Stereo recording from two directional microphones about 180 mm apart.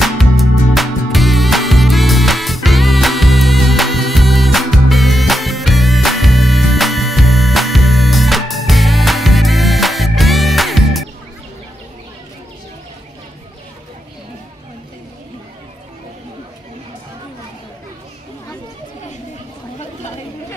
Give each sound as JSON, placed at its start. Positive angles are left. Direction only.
{"t": 0.0, "sound": "music", "side_deg": 0}